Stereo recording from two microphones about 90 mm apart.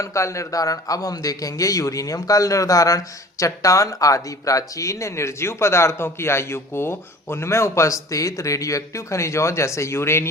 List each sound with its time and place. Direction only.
0.0 s a man's voice: 35° left (ahead or behind)